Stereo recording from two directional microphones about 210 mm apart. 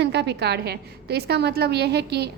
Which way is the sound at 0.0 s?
55° right (ahead or behind).